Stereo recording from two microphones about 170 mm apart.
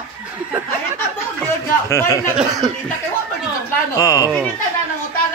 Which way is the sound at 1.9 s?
15° left (ahead or behind).